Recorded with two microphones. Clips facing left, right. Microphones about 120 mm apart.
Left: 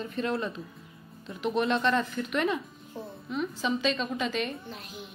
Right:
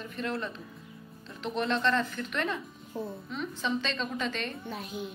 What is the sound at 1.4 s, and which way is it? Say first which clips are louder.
A woman's voice: left 3 dB; 10° left (ahead or behind).